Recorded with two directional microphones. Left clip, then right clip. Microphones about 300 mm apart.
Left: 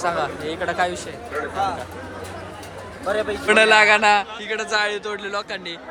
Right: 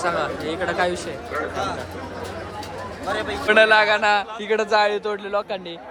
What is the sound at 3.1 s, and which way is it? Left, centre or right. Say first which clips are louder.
Speech: left 3 dB; left.